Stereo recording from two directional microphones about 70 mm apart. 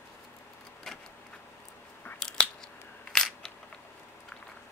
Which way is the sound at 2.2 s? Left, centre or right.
Centre.